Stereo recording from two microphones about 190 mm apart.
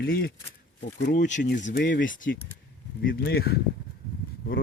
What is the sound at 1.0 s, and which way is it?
Speech, 45° left (ahead or behind).